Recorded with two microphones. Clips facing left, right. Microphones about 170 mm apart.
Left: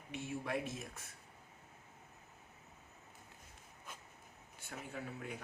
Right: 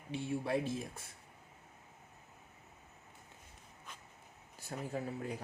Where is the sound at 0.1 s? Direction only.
30° right (ahead or behind).